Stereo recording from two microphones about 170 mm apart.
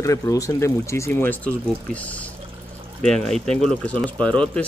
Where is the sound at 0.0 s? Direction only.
20° left (ahead or behind).